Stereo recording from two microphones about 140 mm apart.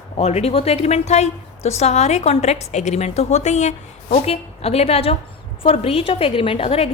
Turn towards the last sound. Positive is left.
turn(degrees=45)  # may be behind; listen again after turning